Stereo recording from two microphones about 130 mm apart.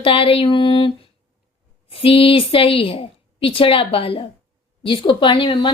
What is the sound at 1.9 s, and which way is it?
A woman's voice, 45° left (ahead or behind).